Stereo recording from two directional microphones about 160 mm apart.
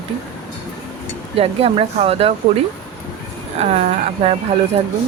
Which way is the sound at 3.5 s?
40° right (ahead or behind).